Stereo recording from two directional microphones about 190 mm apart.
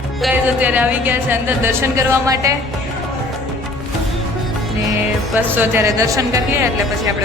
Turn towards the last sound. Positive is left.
turn(degrees=-15)  # may be behind; listen again after turning